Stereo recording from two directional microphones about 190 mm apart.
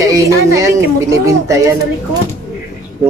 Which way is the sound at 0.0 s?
15° right (ahead or behind).